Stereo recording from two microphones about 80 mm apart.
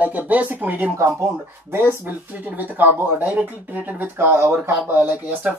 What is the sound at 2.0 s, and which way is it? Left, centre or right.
Speech, right.